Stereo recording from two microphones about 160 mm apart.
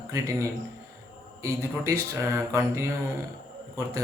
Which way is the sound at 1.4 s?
15° right (ahead or behind).